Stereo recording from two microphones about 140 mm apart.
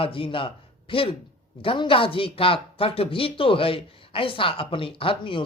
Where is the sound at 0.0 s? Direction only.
40° left (ahead or behind).